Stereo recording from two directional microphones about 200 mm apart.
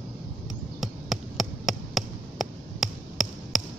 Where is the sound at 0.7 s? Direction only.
Centre (ahead or behind).